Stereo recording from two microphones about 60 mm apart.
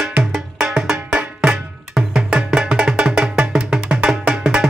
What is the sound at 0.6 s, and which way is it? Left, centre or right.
Music, centre.